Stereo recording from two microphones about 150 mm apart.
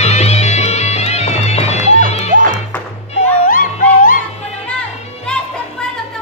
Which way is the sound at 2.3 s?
65° right (ahead or behind).